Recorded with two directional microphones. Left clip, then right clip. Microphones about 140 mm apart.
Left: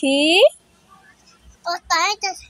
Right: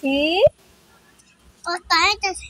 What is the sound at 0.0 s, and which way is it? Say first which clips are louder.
Speech: left 3 dB; 65° left (ahead or behind).